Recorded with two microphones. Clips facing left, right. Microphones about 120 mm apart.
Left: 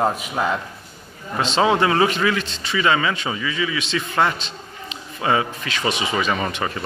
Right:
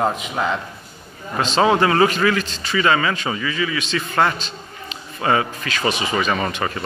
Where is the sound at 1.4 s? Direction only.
25° left (ahead or behind).